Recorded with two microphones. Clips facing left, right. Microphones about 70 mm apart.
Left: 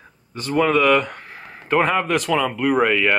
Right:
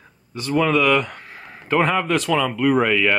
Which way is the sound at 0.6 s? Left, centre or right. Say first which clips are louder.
Left 2 dB; left.